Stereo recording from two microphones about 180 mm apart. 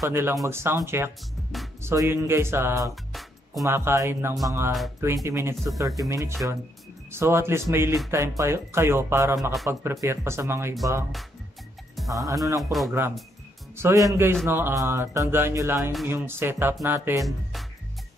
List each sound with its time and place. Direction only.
0.0 s music: 15° right (ahead or behind)
3.1 s music: centre (ahead or behind)
3.6 s music: 15° right (ahead or behind)
12.1 s speech: 20° right (ahead or behind)
12.4 s music: 15° right (ahead or behind)
13.7 s speech: 15° right (ahead or behind)
14.4 s music: 15° right (ahead or behind)